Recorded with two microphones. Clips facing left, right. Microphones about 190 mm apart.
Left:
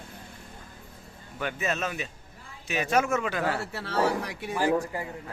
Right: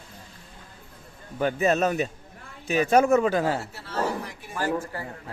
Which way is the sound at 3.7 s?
70° left (ahead or behind).